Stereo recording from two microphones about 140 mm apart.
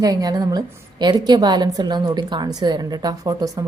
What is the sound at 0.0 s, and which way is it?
Speech, 25° right (ahead or behind).